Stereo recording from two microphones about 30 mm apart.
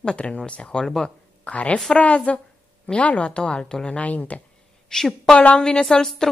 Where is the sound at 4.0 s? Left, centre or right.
Left.